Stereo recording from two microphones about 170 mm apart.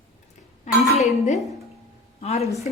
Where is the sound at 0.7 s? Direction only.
45° left (ahead or behind).